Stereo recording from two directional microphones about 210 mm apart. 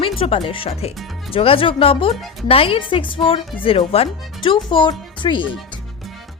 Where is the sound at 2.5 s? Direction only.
25° left (ahead or behind).